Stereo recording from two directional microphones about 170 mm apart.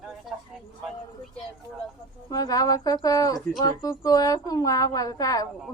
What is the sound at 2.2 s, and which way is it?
Speech, 20° left (ahead or behind).